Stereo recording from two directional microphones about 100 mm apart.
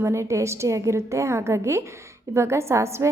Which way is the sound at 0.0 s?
30° right (ahead or behind).